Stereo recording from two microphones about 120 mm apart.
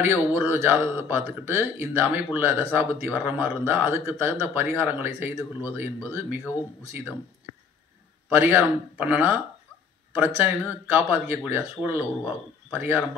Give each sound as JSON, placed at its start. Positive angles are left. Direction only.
{"t": 0.0, "sound": "speech", "side_deg": -15}
{"t": 8.3, "sound": "speech", "side_deg": -15}